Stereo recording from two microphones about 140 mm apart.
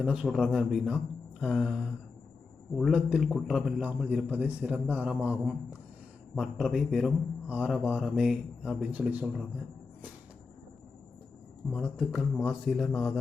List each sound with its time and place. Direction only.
0.0 s a man's voice: 5° right (ahead or behind)
11.7 s speech: 5° right (ahead or behind)